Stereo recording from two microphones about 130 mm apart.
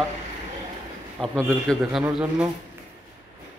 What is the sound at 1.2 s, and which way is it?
A man's voice, centre (ahead or behind).